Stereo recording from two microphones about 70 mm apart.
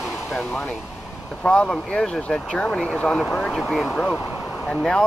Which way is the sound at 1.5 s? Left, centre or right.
Centre.